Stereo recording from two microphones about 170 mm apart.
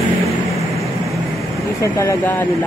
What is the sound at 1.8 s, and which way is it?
Speech, 15° left (ahead or behind).